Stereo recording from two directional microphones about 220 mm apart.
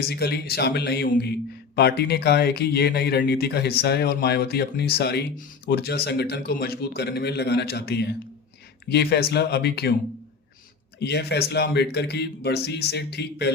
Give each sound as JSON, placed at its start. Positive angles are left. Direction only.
{"t": 0.0, "sound": "speech", "side_deg": 45}
{"t": 11.0, "sound": "speech", "side_deg": 50}